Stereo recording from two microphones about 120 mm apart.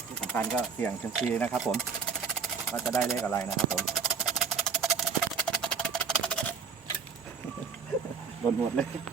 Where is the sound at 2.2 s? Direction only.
Centre (ahead or behind).